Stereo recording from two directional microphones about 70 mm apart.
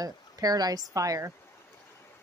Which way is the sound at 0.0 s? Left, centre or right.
Right.